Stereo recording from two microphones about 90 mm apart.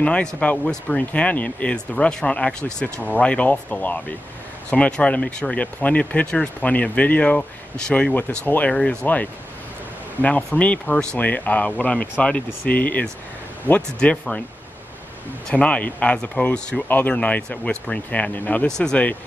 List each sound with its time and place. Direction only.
0.0 s speech: 15° left (ahead or behind)
15.5 s speech: 15° left (ahead or behind)
16.8 s speech: 20° left (ahead or behind)
18.7 s speech: 10° left (ahead or behind)